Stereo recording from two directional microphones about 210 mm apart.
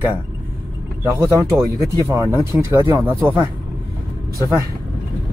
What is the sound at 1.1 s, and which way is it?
Speech, 15° right (ahead or behind).